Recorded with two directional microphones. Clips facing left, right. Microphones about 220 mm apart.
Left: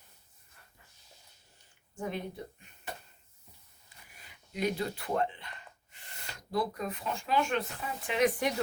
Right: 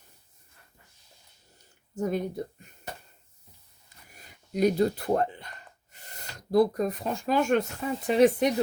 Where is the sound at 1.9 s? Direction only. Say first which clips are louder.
Right 8 dB; 40° right (ahead or behind).